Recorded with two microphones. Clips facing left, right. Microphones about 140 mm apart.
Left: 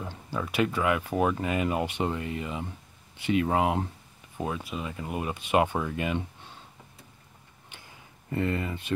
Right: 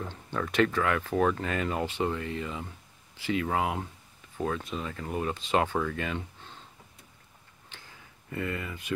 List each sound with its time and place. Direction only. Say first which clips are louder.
0.0 s speech: even; 5° left (ahead or behind); by 3.8 s 25° left (ahead or behind)
4.4 s speech: right 1 dB; 10° left (ahead or behind)
7.7 s a sound: left 1 dB; 15° left (ahead or behind)
8.3 s speech: left 5 dB; 30° left (ahead or behind)